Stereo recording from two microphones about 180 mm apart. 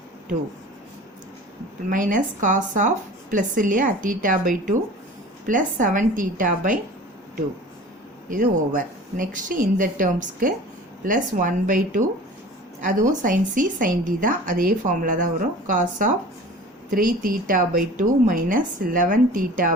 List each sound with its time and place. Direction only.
1.9 s a woman's voice: 45° right (ahead or behind)
9.1 s a woman's voice: 50° right (ahead or behind)